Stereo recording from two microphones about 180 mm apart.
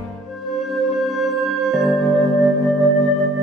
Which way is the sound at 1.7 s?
Centre (ahead or behind).